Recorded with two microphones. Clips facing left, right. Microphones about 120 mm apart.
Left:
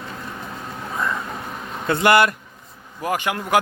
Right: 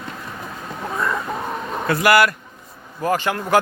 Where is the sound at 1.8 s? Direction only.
25° left (ahead or behind).